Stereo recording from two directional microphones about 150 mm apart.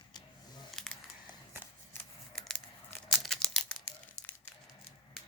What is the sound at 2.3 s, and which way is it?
Tearing, 5° left (ahead or behind).